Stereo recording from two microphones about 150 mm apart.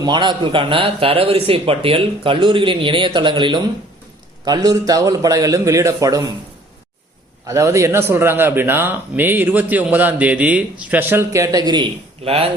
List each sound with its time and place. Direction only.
0.0 s a man's voice: 30° right (ahead or behind)
7.4 s a man's voice: 20° right (ahead or behind)
12.2 s a man's voice: 40° right (ahead or behind)